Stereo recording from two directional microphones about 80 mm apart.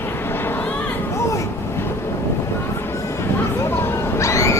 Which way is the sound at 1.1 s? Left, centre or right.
Left.